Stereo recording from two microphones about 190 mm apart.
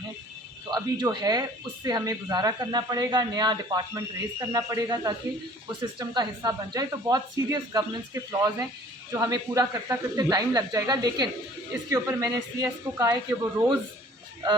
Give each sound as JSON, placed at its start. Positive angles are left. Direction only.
{"t": 0.7, "sound": "speech", "side_deg": -20}